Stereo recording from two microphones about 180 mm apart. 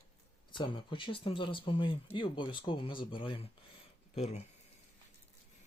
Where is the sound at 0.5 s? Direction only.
25° left (ahead or behind).